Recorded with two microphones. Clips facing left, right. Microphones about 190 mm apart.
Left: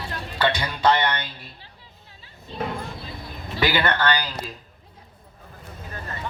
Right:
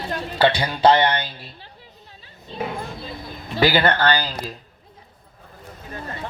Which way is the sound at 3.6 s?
35° right (ahead or behind).